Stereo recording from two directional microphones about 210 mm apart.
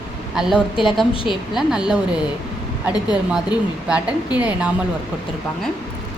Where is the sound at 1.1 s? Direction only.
25° left (ahead or behind).